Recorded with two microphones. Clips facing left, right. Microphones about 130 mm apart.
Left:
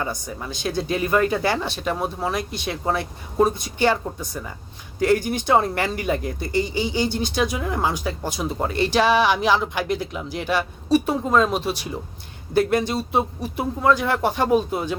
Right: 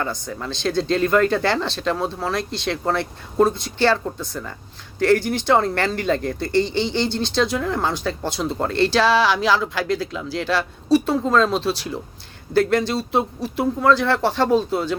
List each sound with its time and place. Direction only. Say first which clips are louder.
0.0 s speech: right 2 dB; 15° left (ahead or behind)